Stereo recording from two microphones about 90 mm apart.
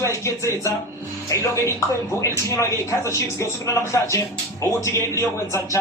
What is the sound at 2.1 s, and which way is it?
Speech, 35° left (ahead or behind).